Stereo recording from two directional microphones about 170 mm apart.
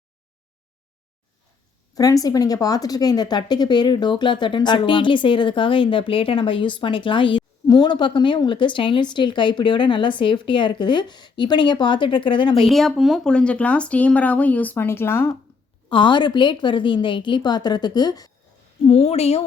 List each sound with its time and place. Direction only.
2.0 s a woman's voice: 20° left (ahead or behind)
12.6 s speech: centre (ahead or behind)
15.9 s a woman's voice: 30° left (ahead or behind)
18.9 s a woman's voice: 35° left (ahead or behind)